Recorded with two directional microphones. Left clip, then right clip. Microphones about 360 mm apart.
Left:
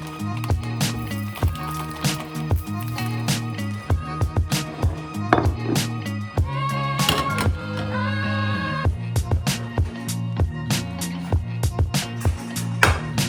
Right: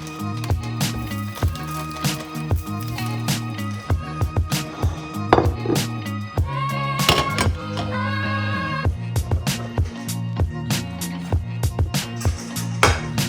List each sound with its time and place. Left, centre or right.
0.2 s music: centre